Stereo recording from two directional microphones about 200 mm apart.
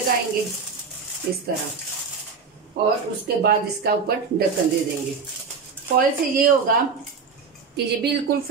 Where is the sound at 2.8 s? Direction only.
50° right (ahead or behind).